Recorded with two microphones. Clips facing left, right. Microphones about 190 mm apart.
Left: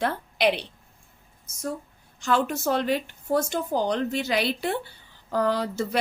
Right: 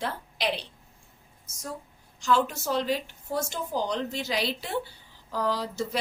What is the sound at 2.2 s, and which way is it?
A woman's voice, 55° left (ahead or behind).